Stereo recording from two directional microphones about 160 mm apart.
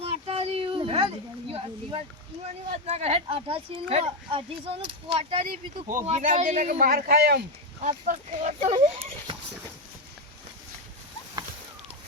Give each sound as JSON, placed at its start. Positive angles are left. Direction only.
{"t": 0.0, "sound": "a child's voice", "side_deg": -35}
{"t": 7.8, "sound": "speech", "side_deg": -45}